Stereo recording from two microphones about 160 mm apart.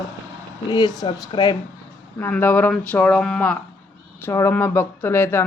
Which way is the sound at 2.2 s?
15° left (ahead or behind).